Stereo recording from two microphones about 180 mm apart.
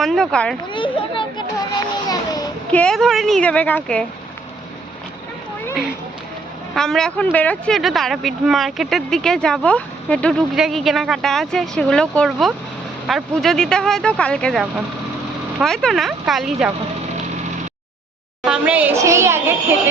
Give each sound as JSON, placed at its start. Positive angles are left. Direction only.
{"t": 0.0, "sound": "speech", "side_deg": 0}
{"t": 0.7, "sound": "children playing", "side_deg": 25}
{"t": 2.0, "sound": "a sound", "side_deg": 20}
{"t": 2.7, "sound": "speech", "side_deg": 5}
{"t": 6.7, "sound": "speech", "side_deg": 5}
{"t": 18.4, "sound": "a woman's voice", "side_deg": -5}